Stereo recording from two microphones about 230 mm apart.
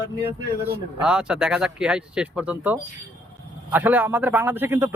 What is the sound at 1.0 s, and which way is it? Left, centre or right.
Speech, centre.